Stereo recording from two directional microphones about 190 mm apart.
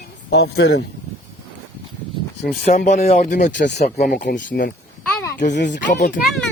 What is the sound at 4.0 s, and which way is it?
Speech, 55° left (ahead or behind).